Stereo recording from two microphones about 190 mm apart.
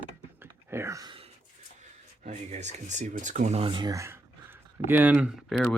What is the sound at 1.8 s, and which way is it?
Speech, 35° right (ahead or behind).